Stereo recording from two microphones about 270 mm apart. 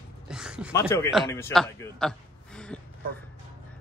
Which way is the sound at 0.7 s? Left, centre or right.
Centre.